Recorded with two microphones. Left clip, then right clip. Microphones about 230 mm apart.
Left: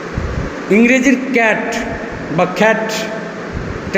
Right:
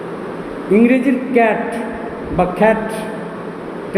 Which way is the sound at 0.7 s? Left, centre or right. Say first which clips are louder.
Left 2 dB; left.